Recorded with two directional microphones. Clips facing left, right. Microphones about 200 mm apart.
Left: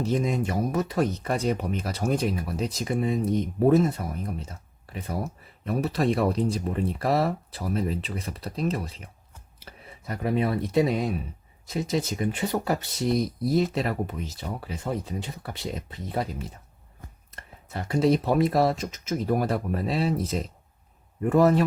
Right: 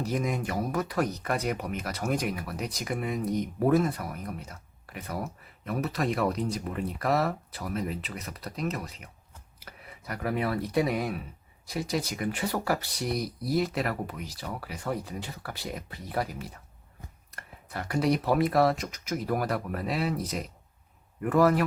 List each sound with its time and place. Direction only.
0.0 s speech: 25° left (ahead or behind)